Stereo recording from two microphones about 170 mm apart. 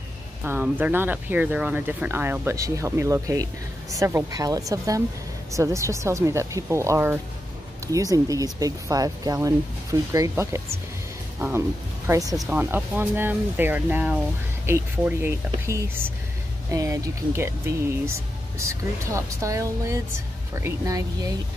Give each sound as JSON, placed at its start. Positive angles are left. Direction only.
{"t": 0.4, "sound": "speech", "side_deg": -10}
{"t": 12.1, "sound": "speech", "side_deg": -20}
{"t": 12.4, "sound": "speech", "side_deg": -10}